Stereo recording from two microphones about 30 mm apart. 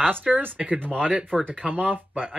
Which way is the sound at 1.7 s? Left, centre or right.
Right.